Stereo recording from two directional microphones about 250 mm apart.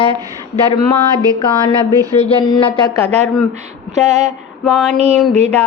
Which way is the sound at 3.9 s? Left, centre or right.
Right.